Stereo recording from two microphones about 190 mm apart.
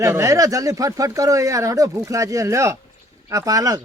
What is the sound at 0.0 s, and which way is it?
Speech, 15° right (ahead or behind).